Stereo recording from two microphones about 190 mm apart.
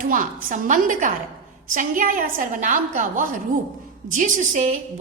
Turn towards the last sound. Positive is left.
turn(degrees=-40)  # may be behind; listen again after turning